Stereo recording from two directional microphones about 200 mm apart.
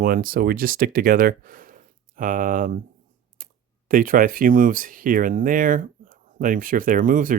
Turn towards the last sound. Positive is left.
turn(degrees=-40)  # may be behind; listen again after turning